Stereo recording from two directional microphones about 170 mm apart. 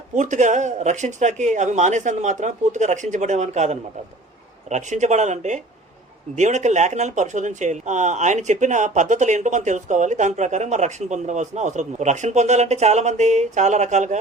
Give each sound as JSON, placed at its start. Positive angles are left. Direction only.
{"t": 0.2, "sound": "speech", "side_deg": -45}